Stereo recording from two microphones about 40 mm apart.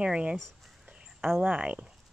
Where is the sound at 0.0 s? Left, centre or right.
Right.